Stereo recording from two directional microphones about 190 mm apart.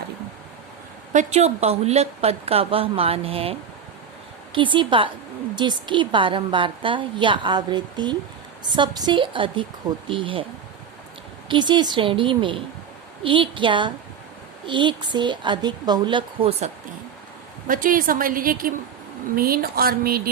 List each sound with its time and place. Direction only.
1.1 s a woman's voice: 35° right (ahead or behind)
11.4 s a woman's voice: 25° right (ahead or behind)
17.7 s a woman's voice: 45° right (ahead or behind)